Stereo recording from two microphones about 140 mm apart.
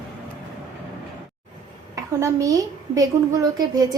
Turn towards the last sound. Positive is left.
turn(degrees=-25)  # may be behind; listen again after turning